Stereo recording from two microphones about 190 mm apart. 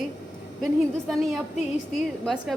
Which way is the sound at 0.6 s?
Centre (ahead or behind).